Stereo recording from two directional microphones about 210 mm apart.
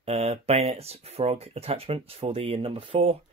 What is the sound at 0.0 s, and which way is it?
Speech, 30° right (ahead or behind).